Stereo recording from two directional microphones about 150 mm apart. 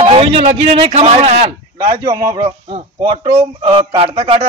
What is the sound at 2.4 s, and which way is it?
Speech, 40° right (ahead or behind).